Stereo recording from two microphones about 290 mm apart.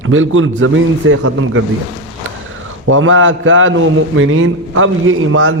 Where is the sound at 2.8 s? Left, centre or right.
Right.